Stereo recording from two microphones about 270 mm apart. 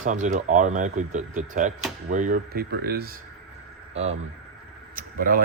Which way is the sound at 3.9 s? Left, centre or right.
Right.